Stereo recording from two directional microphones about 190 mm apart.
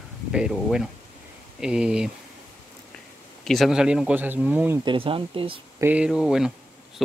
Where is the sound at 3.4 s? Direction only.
Centre (ahead or behind).